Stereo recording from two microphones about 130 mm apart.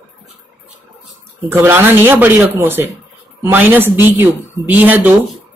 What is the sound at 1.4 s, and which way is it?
Speech, 20° right (ahead or behind).